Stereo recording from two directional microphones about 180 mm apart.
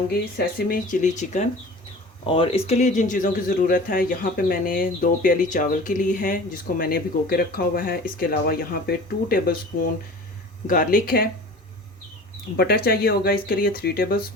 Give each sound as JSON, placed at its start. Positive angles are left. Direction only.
{"t": 0.1, "sound": "speech", "side_deg": 55}
{"t": 2.2, "sound": "speech", "side_deg": 30}
{"t": 10.7, "sound": "speech", "side_deg": 50}
{"t": 12.5, "sound": "speech", "side_deg": 60}